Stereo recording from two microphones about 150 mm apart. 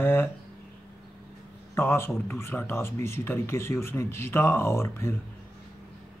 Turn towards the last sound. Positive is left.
turn(degrees=15)  # may be behind; listen again after turning